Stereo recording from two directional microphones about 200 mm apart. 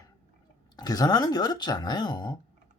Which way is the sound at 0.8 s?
20° left (ahead or behind).